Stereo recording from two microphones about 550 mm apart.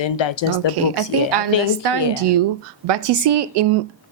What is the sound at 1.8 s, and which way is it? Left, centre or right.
Speech, right.